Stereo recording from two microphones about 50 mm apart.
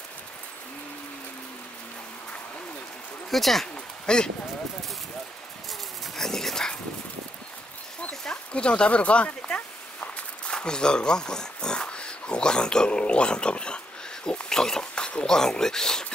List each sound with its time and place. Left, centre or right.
3.3 s speech: centre
3.7 s a sound: centre
6.1 s dog: centre
8.1 s a sound: centre
10.5 s speech: centre
14.2 s insect: centre
14.6 s speech: centre